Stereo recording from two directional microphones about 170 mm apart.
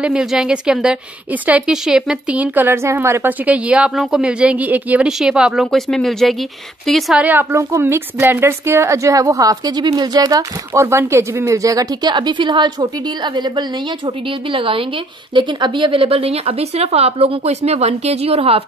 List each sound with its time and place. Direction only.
0.0 s a woman's voice: 5° right (ahead or behind); by 18.6 s 35° right (ahead or behind)